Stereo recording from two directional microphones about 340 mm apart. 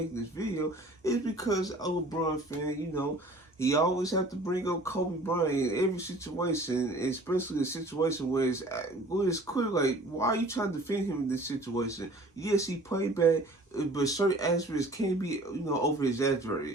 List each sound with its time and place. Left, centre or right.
0.1 s speech: centre